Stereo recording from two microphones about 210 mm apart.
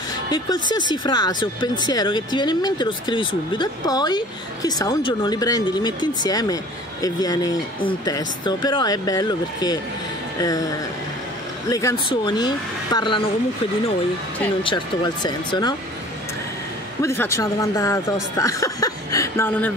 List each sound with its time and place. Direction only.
0.3 s speech: 20° left (ahead or behind)
11.7 s speech: 20° left (ahead or behind)
15.2 s speech: 20° left (ahead or behind)
17.0 s speech: 15° left (ahead or behind)